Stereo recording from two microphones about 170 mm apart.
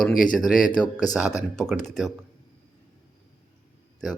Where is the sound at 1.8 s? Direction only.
Centre (ahead or behind).